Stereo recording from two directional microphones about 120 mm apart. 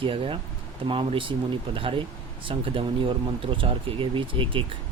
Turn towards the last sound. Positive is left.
turn(degrees=-45)  # may be behind; listen again after turning